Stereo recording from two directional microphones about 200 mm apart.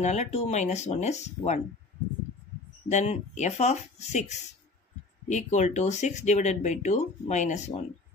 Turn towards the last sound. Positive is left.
turn(degrees=35)  # may be behind; listen again after turning